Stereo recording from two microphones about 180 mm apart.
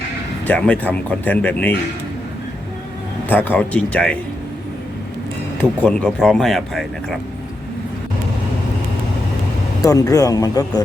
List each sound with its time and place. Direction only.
0.4 s speech: 10° left (ahead or behind)
3.2 s speech: 10° left (ahead or behind)
5.8 s speech: 5° left (ahead or behind)
9.8 s speech: 20° left (ahead or behind)